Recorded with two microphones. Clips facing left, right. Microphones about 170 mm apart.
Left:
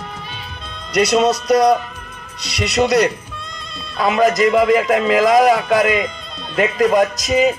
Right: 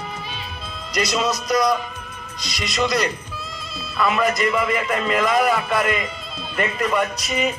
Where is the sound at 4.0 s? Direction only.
90° left.